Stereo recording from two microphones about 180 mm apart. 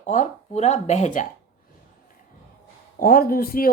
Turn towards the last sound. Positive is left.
turn(degrees=55)  # may be behind; listen again after turning